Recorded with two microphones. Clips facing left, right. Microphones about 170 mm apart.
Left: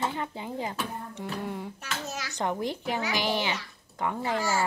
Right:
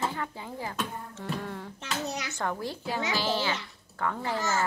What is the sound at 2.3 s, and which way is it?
A child's voice, 20° left (ahead or behind).